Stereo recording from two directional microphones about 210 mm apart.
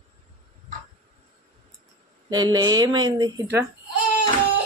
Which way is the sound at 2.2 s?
20° right (ahead or behind).